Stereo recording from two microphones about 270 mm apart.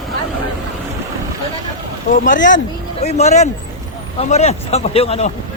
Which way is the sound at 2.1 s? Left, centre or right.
Left.